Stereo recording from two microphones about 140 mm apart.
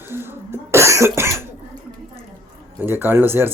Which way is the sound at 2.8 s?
15° right (ahead or behind).